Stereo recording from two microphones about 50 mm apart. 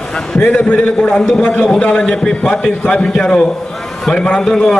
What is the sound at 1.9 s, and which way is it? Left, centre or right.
Speech, centre.